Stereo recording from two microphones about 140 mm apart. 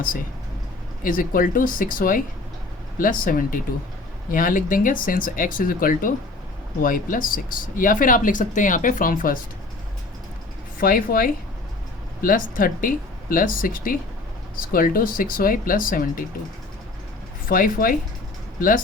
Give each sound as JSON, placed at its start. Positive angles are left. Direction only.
{"t": 1.0, "sound": "speech", "side_deg": 80}
{"t": 10.8, "sound": "a woman's voice", "side_deg": 90}
{"t": 17.5, "sound": "speech", "side_deg": 90}